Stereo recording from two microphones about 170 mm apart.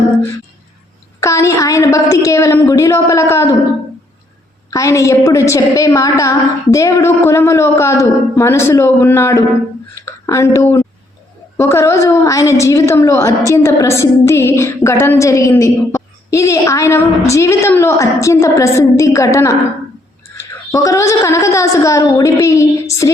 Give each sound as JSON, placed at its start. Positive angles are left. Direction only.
{"t": 1.2, "sound": "a woman's voice", "side_deg": 15}
{"t": 4.7, "sound": "a woman's voice", "side_deg": 20}